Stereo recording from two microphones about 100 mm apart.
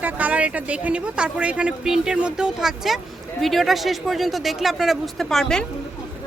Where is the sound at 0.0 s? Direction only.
15° right (ahead or behind); by 5.6 s 5° left (ahead or behind).